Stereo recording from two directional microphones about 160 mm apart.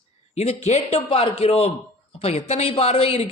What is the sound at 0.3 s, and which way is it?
A man's voice, 40° left (ahead or behind).